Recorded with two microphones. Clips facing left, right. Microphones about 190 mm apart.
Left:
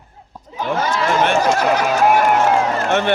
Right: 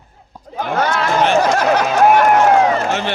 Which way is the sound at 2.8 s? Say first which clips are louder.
Left 2 dB; 55° left (ahead or behind).